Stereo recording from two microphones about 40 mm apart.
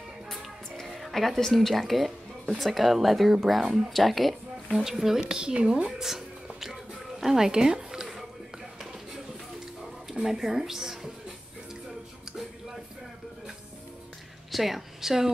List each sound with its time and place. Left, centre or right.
0.3 s music: centre
2.5 s speech: centre
4.8 s a woman's voice: centre
5.2 s speech: right
6.6 s a sound: centre
10.2 s a woman's voice: centre
14.5 s speech: centre